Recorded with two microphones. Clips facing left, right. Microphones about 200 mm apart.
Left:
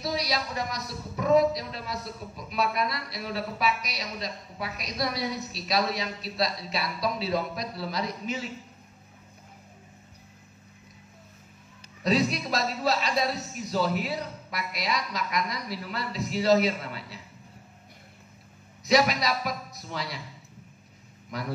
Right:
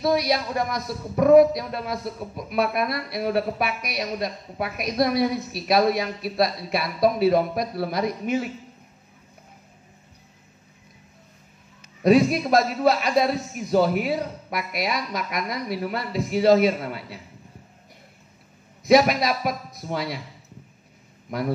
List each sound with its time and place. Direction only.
0.0 s speech: 55° right (ahead or behind)
12.0 s a man's voice: 55° right (ahead or behind)
18.9 s a man's voice: 55° right (ahead or behind)
21.3 s a man's voice: 55° right (ahead or behind)